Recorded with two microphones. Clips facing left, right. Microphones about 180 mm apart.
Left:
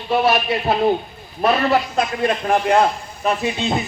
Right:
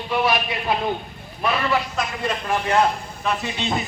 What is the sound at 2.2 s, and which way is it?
Speech, 55° left (ahead or behind).